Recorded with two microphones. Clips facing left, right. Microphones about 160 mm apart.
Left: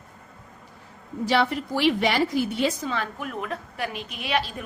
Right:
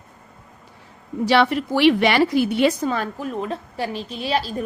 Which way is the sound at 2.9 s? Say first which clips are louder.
Right 5 dB; 40° right (ahead or behind).